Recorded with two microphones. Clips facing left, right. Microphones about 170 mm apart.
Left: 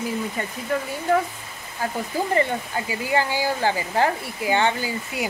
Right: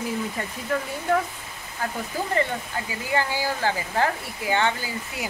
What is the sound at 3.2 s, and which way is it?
Speech, 20° left (ahead or behind).